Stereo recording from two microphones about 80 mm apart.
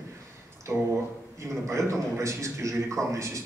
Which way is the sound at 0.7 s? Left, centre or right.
Right.